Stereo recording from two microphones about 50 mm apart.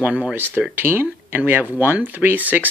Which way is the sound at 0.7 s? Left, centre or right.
Right.